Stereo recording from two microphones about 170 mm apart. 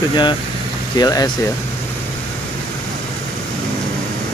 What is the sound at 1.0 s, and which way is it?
Speech, 20° left (ahead or behind).